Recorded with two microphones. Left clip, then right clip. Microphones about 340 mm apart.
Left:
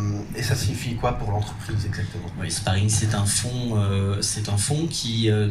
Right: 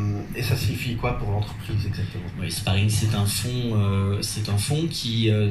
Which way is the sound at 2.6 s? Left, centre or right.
Left.